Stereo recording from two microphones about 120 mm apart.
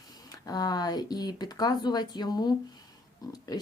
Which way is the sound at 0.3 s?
30° left (ahead or behind).